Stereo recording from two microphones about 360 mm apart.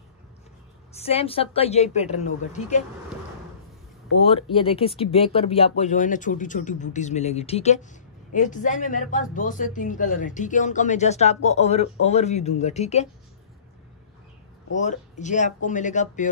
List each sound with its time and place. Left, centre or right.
0.9 s a man's voice: centre
4.3 s a man's voice: centre
14.8 s speech: centre